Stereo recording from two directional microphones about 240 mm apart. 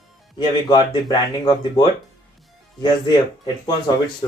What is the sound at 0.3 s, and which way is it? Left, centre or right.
Speech, centre.